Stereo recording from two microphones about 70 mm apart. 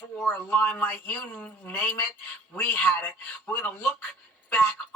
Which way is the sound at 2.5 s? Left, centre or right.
Left.